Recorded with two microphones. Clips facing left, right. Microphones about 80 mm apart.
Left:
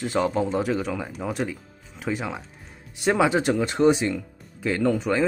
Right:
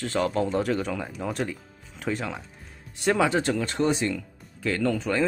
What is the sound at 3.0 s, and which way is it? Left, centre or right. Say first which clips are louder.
Speech: left 2 dB; centre.